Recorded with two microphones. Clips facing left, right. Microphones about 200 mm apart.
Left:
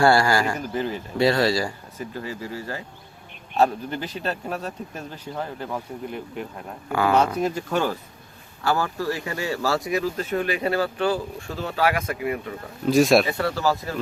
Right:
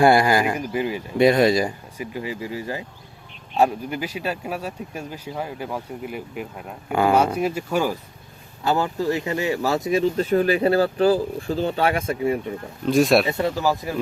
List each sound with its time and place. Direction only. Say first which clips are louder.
0.0 s speech: right 2 dB; 20° right (ahead or behind)
8.6 s speech: right 2 dB; 20° right (ahead or behind)
12.8 s speech: even; centre (ahead or behind)
13.2 s speech: right 2 dB; 20° right (ahead or behind)